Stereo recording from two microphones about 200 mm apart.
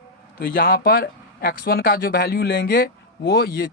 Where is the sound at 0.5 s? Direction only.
45° left (ahead or behind).